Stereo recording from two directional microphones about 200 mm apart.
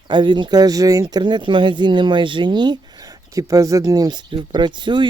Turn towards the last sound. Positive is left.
turn(degrees=-25)  # may be behind; listen again after turning